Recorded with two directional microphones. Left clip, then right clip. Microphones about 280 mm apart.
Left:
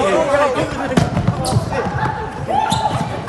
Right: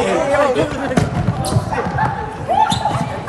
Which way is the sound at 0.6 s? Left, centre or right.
Centre.